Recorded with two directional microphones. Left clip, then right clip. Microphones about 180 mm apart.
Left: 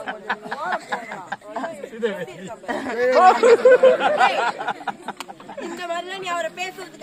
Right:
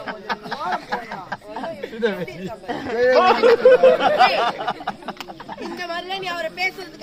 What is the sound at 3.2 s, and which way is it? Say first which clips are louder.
Speech: left 3 dB; 15° left (ahead or behind).